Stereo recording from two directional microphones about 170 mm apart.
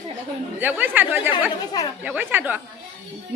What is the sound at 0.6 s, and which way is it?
A woman's voice, 10° right (ahead or behind).